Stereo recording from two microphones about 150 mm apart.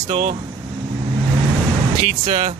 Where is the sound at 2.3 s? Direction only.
60° right (ahead or behind).